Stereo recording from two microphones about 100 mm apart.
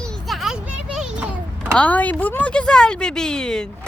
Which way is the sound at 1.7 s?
15° left (ahead or behind).